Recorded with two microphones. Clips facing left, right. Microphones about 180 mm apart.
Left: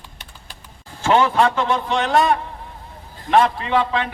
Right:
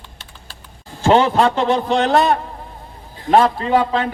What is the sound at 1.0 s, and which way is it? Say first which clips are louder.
A man's voice: right 3 dB; 35° right (ahead or behind).